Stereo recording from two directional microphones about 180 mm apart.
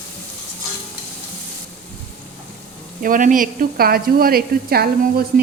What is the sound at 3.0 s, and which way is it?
Speech, 50° right (ahead or behind).